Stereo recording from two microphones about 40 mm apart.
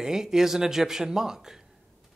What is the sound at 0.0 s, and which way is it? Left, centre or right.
A man's voice, centre.